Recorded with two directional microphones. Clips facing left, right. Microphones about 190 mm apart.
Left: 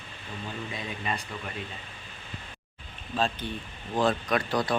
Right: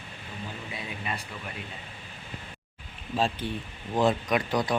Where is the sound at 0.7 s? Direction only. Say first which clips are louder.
Left 2 dB; 10° right (ahead or behind).